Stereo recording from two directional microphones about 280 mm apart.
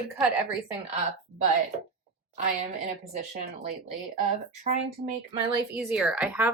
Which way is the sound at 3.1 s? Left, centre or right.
Right.